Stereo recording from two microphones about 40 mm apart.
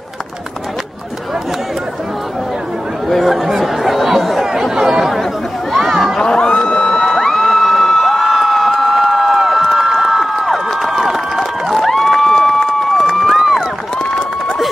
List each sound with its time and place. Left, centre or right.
3.1 s speech: centre
3.4 s chatter: centre
6.1 s crowd: centre
7.1 s a sound: centre